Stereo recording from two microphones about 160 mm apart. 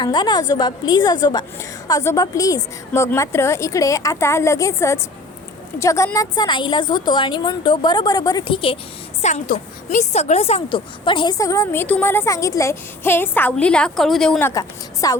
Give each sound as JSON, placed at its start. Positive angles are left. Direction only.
{"t": 0.0, "sound": "a woman's voice", "side_deg": 25}
{"t": 9.2, "sound": "a woman's voice", "side_deg": 50}
{"t": 14.5, "sound": "a woman's voice", "side_deg": 20}